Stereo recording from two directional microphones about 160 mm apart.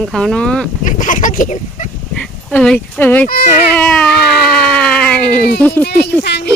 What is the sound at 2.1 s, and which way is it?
Speech, 5° left (ahead or behind).